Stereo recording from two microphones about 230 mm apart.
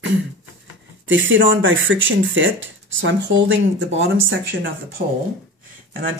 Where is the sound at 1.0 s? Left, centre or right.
Right.